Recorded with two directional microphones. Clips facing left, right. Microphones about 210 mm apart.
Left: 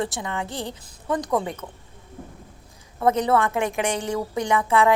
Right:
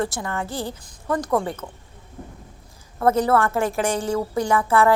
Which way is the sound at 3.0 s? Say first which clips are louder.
Right 2 dB; 15° left (ahead or behind).